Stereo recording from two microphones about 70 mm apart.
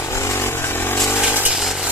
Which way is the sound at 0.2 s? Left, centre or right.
Left.